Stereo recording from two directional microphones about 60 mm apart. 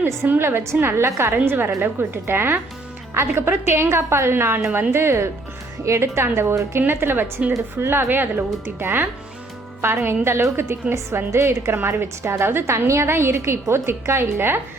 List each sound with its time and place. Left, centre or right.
0.3 s a woman's voice: right
11.7 s a woman's voice: right